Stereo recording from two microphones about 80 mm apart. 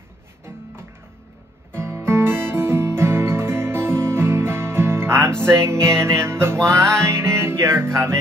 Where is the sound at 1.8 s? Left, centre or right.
Right.